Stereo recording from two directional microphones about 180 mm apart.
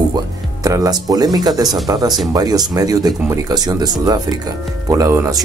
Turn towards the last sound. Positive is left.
turn(degrees=-15)  # may be behind; listen again after turning